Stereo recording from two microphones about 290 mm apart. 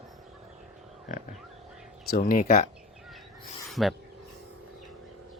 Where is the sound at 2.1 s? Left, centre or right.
Left.